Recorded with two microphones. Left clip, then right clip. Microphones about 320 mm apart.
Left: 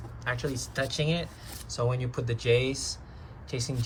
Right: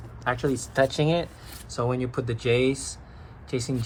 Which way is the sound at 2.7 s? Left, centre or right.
Centre.